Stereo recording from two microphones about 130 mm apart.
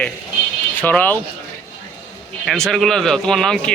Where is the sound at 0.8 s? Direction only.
15° left (ahead or behind).